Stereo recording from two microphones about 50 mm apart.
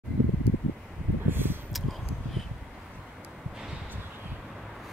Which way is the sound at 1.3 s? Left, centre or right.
Right.